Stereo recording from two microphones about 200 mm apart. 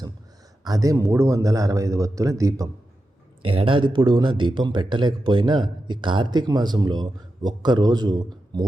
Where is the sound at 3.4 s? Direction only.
25° right (ahead or behind).